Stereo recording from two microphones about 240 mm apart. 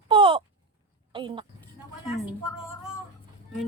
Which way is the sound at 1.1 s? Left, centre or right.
Right.